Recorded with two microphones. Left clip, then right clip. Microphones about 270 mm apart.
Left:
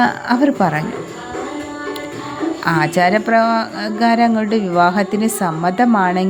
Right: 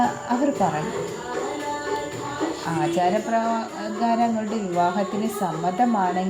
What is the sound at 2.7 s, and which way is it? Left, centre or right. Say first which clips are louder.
Speech: left 8 dB; left.